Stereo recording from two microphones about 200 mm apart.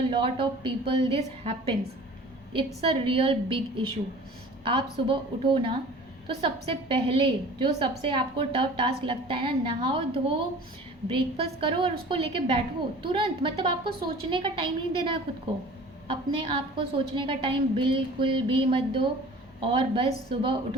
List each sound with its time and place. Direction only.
0.1 s a woman's voice: 25° right (ahead or behind)
2.8 s a woman's voice: 25° right (ahead or behind)